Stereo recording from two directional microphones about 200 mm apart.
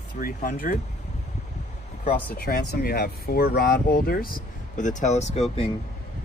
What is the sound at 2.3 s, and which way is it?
Speech, 50° left (ahead or behind).